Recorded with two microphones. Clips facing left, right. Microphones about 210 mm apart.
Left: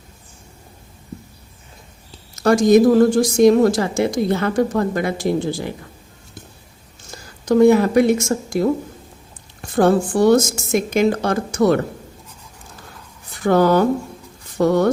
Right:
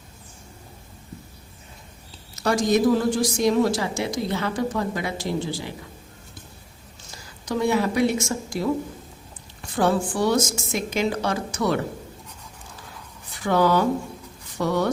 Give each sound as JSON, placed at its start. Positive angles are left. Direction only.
{"t": 2.4, "sound": "a woman's voice", "side_deg": 50}
{"t": 7.1, "sound": "a woman's voice", "side_deg": 50}
{"t": 13.4, "sound": "a woman's voice", "side_deg": 50}